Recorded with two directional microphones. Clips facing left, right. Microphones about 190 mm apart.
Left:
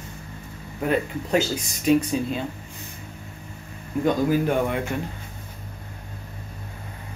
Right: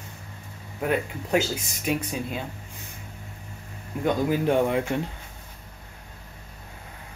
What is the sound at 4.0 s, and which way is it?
A man's voice, 25° right (ahead or behind).